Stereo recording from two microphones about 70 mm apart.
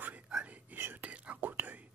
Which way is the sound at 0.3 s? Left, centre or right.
Centre.